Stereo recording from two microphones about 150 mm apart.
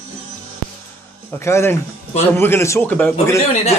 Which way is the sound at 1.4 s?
15° left (ahead or behind).